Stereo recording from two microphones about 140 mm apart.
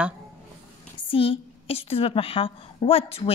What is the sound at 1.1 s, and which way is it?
A woman's voice, 40° left (ahead or behind).